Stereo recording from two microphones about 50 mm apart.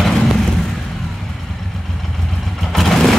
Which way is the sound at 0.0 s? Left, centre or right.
Centre.